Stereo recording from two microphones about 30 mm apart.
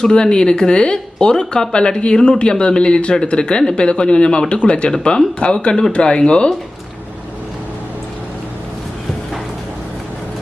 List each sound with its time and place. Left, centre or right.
0.0 s speech: left